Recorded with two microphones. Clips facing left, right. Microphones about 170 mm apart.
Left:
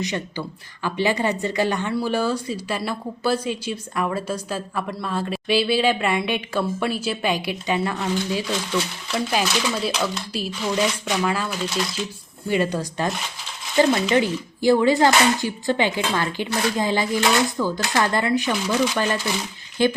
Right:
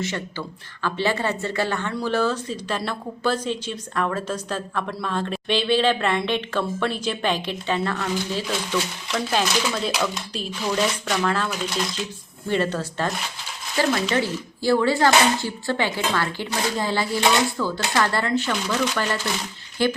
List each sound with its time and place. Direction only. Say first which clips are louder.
0.0 s speech: left 2 dB; 15° left (ahead or behind)